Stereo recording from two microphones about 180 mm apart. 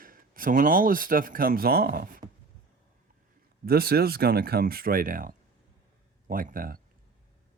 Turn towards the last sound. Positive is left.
turn(degrees=-50)  # may be behind; listen again after turning